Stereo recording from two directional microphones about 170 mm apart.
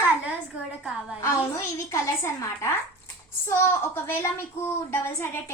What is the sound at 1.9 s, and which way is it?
A woman's voice, 20° left (ahead or behind).